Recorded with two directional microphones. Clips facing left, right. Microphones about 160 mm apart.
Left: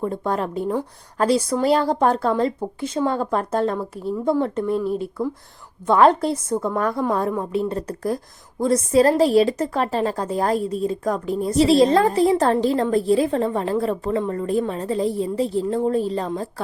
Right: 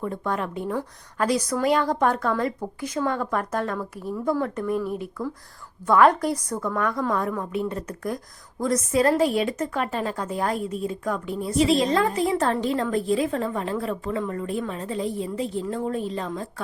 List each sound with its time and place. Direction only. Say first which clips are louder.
0.0 s a woman's voice: left 4 dB; 30° left (ahead or behind)